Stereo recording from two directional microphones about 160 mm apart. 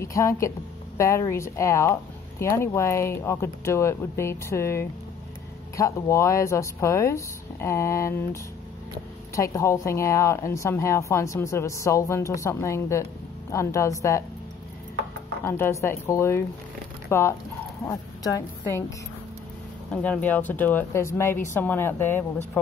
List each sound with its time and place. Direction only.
0.0 s a woman's voice: 20° left (ahead or behind)
15.4 s a woman's voice: 15° left (ahead or behind)
19.9 s speech: 10° left (ahead or behind)